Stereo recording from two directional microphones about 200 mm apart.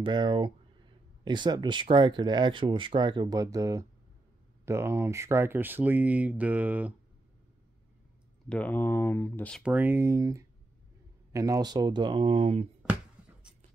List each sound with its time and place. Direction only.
0.0 s speech: 25° right (ahead or behind); by 6.9 s 5° right (ahead or behind)
8.5 s speech: 5° left (ahead or behind)
9.6 s speech: 10° right (ahead or behind); by 12.6 s 30° right (ahead or behind)